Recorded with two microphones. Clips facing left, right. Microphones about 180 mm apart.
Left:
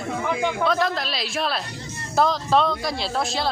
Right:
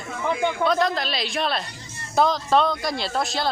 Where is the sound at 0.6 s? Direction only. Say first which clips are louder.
Right 2 dB; centre (ahead or behind).